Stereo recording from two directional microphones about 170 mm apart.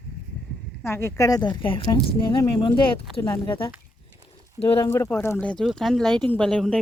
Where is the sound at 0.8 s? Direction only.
15° left (ahead or behind); by 4.8 s 35° left (ahead or behind).